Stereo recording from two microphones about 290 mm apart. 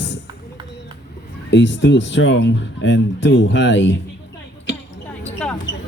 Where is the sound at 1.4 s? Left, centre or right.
Left.